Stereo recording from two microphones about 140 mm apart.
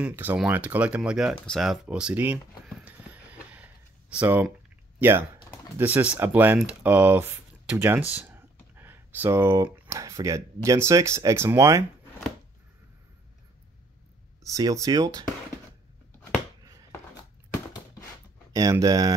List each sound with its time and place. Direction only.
0.0 s speech: 15° right (ahead or behind)
1.4 s a sound: centre (ahead or behind)
4.9 s typing: 15° right (ahead or behind)
5.8 s speech: 15° right (ahead or behind)
14.4 s speech: 25° right (ahead or behind)
18.5 s speech: 25° right (ahead or behind)